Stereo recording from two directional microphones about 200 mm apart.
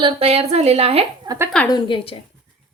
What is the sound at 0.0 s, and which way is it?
A woman's voice, 30° right (ahead or behind).